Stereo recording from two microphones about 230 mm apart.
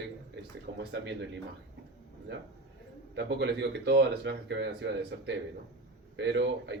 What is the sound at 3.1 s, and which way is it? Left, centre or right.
Speech, right.